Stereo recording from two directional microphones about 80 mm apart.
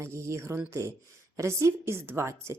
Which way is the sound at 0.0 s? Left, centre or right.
Right.